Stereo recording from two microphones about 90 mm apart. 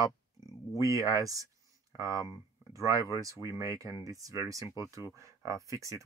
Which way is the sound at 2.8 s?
40° right (ahead or behind).